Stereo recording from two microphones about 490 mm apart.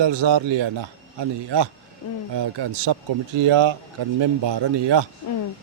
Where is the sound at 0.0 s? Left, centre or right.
Right.